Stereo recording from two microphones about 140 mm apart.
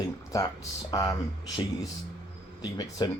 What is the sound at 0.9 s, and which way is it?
Speech, 25° left (ahead or behind).